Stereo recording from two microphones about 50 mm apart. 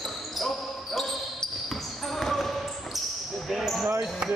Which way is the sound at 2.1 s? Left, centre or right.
Centre.